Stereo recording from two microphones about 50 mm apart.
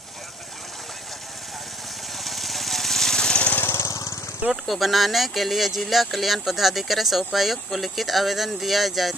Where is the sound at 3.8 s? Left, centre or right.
Left.